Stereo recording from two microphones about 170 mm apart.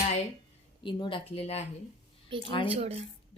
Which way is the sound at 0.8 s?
30° left (ahead or behind).